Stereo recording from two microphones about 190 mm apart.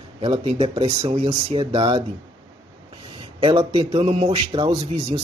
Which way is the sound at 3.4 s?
30° right (ahead or behind).